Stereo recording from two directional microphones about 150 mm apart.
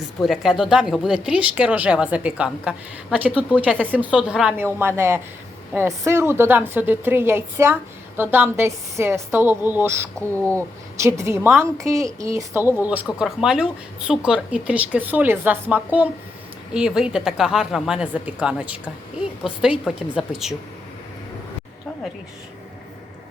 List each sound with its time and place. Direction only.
0.2 s a woman's voice: centre (ahead or behind); by 10.2 s 15° right (ahead or behind)
10.3 s speech: 10° left (ahead or behind)
10.9 s a woman's voice: 20° right (ahead or behind); by 20.6 s 5° right (ahead or behind)